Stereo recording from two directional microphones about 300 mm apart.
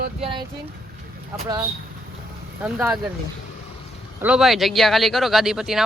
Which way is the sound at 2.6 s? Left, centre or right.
Centre.